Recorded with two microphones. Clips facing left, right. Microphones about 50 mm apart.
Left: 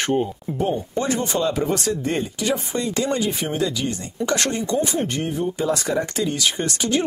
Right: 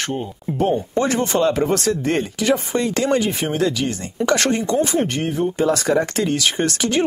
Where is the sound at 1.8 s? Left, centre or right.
Right.